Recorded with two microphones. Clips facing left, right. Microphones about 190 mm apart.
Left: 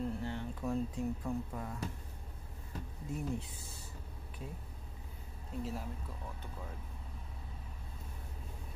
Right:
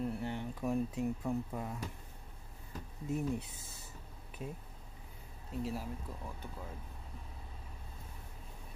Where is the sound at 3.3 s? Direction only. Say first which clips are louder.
Even; 20° right (ahead or behind).